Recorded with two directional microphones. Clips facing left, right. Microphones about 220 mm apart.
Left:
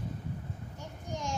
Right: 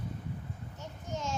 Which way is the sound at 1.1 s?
15° left (ahead or behind).